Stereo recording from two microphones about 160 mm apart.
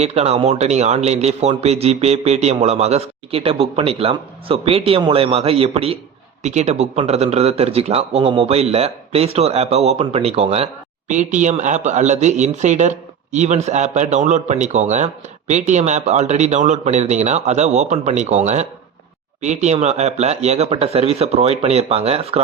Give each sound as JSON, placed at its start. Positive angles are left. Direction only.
{"t": 0.0, "sound": "a man's voice", "side_deg": -40}